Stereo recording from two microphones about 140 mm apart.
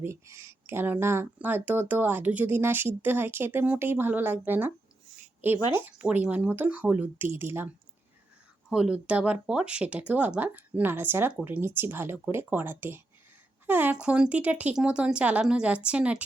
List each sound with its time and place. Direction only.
0.0 s speech: 20° right (ahead or behind)
8.7 s speech: 5° right (ahead or behind)